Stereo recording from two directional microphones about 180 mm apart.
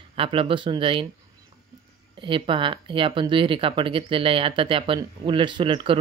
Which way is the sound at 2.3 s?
30° right (ahead or behind).